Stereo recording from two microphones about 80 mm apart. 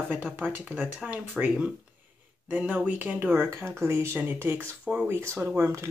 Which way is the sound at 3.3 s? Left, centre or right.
Right.